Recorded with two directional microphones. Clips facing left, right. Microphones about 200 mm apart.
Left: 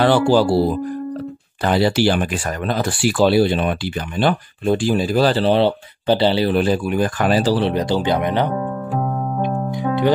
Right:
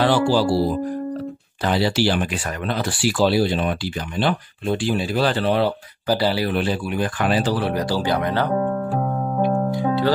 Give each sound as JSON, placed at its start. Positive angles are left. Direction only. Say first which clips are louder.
{"t": 0.0, "sound": "speech", "louder": "left 3 dB", "side_deg": 55}
{"t": 1.6, "sound": "speech", "louder": "left 3 dB", "side_deg": 55}
{"t": 4.2, "sound": "speech", "louder": "left 4 dB", "side_deg": 45}
{"t": 6.5, "sound": "speech", "louder": "left 5 dB", "side_deg": 45}
{"t": 7.6, "sound": "speech", "louder": "left 3 dB", "side_deg": 20}
{"t": 9.4, "sound": "music", "louder": "right 4 dB", "side_deg": 20}